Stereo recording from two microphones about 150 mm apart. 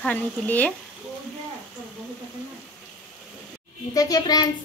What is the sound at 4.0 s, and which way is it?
Speech, 25° left (ahead or behind).